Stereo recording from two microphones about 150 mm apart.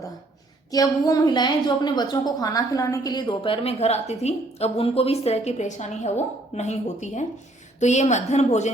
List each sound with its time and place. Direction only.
0.7 s a woman's voice: 25° left (ahead or behind); by 8.7 s 50° left (ahead or behind)